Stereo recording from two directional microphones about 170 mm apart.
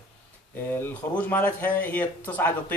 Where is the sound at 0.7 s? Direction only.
10° left (ahead or behind).